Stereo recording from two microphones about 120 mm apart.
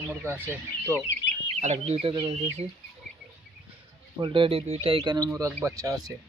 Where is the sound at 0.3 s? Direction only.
20° right (ahead or behind).